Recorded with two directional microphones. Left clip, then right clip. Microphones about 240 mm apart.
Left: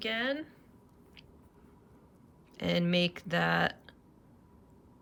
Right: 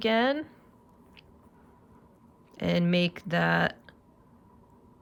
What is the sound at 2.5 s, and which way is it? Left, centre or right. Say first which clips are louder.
Speech: right 3 dB; centre.